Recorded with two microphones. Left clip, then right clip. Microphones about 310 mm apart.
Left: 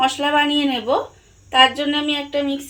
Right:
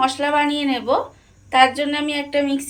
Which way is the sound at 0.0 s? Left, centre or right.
Left.